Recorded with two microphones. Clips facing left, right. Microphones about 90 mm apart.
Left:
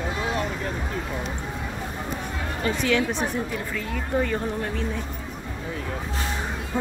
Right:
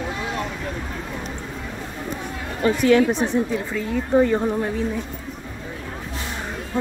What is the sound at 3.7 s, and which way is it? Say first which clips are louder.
Speech: right 8 dB; 20° right (ahead or behind).